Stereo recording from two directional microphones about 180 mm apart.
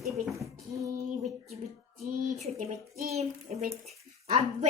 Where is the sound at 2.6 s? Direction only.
45° right (ahead or behind).